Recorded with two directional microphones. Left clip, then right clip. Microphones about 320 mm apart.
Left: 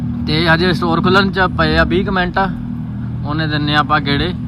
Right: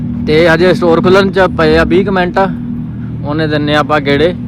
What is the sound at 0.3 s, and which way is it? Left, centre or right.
Speech, centre.